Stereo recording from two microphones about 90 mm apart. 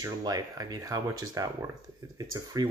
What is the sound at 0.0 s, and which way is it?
Speech, 45° right (ahead or behind).